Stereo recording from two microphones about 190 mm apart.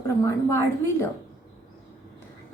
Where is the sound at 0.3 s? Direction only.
15° left (ahead or behind).